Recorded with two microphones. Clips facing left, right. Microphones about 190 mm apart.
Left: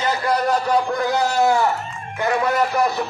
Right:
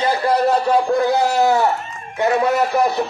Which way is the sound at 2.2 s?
25° right (ahead or behind).